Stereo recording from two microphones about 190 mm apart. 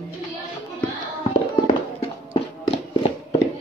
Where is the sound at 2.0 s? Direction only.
30° left (ahead or behind).